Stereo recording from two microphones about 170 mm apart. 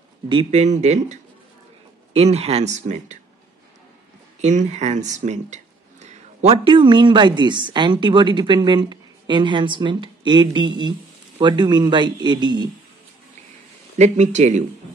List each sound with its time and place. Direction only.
0.3 s speech: 35° right (ahead or behind)
4.4 s speech: 45° right (ahead or behind); by 12.6 s 25° right (ahead or behind)
13.9 s speech: 45° right (ahead or behind)